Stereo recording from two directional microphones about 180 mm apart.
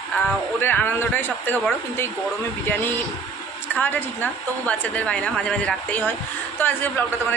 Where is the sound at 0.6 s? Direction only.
10° left (ahead or behind).